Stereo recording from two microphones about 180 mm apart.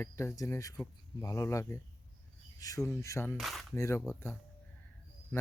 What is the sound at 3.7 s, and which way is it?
Speech, 15° left (ahead or behind).